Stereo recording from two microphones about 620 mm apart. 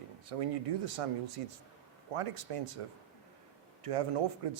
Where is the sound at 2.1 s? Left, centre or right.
Right.